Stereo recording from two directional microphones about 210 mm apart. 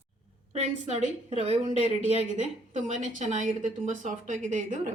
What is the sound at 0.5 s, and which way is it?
A woman's voice, 30° right (ahead or behind).